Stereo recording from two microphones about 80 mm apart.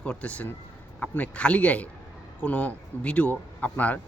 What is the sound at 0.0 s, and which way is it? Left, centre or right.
Speech, centre.